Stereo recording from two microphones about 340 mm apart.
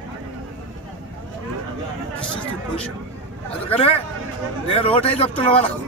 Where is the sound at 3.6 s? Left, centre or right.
Centre.